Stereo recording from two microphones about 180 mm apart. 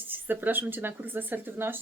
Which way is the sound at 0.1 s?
10° right (ahead or behind).